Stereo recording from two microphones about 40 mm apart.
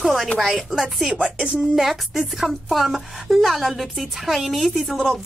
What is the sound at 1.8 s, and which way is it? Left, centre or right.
A woman's voice, centre.